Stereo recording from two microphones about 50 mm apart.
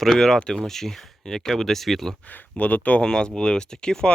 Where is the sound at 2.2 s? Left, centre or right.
Left.